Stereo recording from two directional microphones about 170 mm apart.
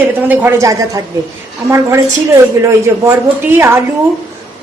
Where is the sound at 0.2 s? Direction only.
10° right (ahead or behind).